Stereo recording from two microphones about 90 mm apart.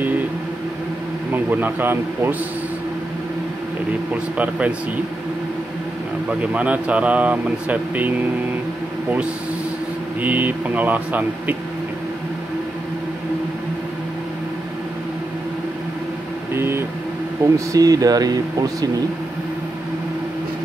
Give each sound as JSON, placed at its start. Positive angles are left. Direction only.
{"t": 1.3, "sound": "speech", "side_deg": -20}
{"t": 4.1, "sound": "speech", "side_deg": -15}
{"t": 6.5, "sound": "speech", "side_deg": -15}
{"t": 10.2, "sound": "speech", "side_deg": -20}
{"t": 16.5, "sound": "vehicle", "side_deg": -25}
{"t": 17.4, "sound": "speech", "side_deg": -35}